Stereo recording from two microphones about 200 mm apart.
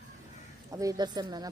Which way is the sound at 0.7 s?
15° right (ahead or behind).